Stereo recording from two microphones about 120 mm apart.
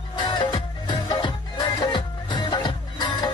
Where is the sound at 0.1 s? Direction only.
40° left (ahead or behind).